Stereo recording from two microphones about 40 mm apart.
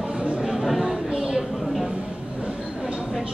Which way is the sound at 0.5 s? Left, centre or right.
Centre.